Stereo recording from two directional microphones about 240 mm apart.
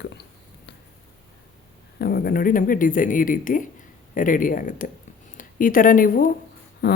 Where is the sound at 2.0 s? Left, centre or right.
Left.